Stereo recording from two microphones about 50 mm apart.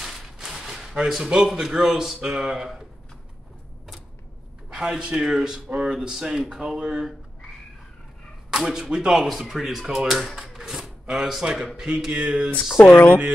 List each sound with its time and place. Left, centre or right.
0.0 s a sound: centre
1.0 s speech: centre
4.6 s speech: centre
8.5 s speech: centre
10.5 s zipper: centre
11.7 s speech: centre
12.8 s speech: left